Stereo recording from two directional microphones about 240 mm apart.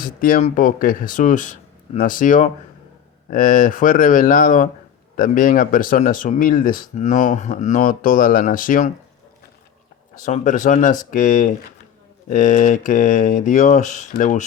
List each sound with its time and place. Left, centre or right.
0.0 s speech: left
10.2 s speech: left